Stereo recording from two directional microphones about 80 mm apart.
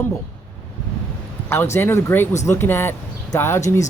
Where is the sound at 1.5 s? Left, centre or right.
Left.